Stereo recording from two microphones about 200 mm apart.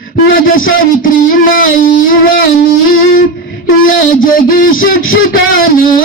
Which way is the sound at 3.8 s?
45° left (ahead or behind).